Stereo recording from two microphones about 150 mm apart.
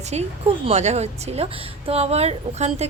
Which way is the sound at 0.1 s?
45° right (ahead or behind).